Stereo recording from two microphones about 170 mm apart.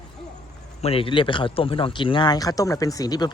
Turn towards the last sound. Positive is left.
turn(degrees=20)  # may be behind; listen again after turning